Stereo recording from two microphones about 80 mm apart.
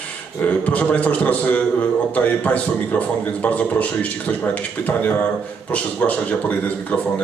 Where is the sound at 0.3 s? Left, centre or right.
Centre.